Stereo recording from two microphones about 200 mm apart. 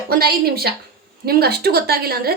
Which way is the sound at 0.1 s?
50° right (ahead or behind).